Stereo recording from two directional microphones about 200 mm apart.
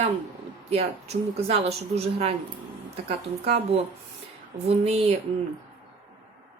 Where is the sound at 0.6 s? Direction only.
30° right (ahead or behind).